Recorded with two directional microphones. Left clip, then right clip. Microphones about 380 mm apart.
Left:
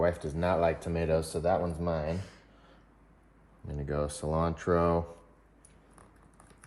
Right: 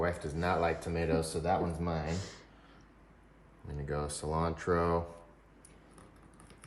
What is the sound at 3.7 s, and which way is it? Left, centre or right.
Speech, centre.